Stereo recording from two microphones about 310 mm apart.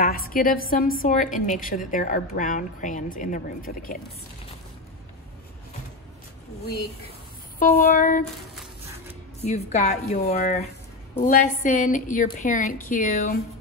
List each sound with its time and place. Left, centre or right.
0.0 s a woman's voice: left
6.6 s a woman's voice: left
9.4 s a woman's voice: left